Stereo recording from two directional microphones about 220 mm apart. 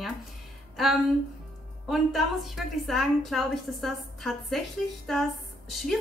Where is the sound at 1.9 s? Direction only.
Centre (ahead or behind).